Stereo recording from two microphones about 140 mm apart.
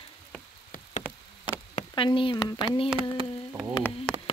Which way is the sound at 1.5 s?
35° left (ahead or behind).